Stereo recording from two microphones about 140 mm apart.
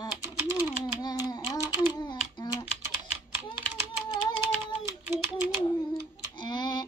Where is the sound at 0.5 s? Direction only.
30° left (ahead or behind).